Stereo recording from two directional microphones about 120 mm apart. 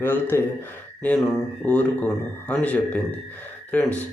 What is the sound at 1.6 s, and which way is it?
Speech, 10° left (ahead or behind).